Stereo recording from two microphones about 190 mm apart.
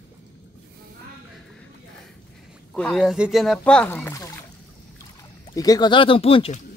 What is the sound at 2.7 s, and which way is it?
Speech, 5° left (ahead or behind).